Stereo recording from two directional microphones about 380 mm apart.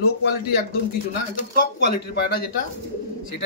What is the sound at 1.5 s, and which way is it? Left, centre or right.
Speech, left.